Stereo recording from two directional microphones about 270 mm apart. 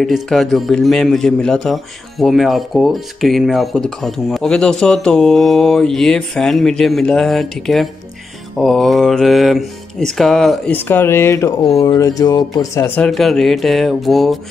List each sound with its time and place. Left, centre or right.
0.0 s a man's voice: centre